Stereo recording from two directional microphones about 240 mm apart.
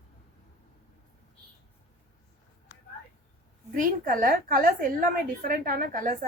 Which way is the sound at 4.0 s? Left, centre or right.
Right.